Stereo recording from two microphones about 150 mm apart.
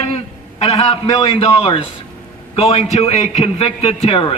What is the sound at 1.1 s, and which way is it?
A man's voice, 40° left (ahead or behind).